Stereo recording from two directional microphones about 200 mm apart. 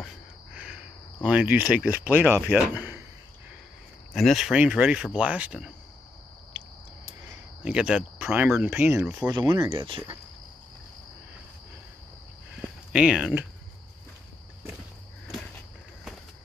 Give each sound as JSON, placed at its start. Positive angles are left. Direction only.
{"t": 0.0, "sound": "a sound", "side_deg": -5}
{"t": 2.7, "sound": "speech", "side_deg": -10}
{"t": 4.1, "sound": "speech", "side_deg": 0}
{"t": 7.6, "sound": "speech", "side_deg": -5}
{"t": 9.3, "sound": "speech", "side_deg": -20}
{"t": 12.6, "sound": "speech", "side_deg": -5}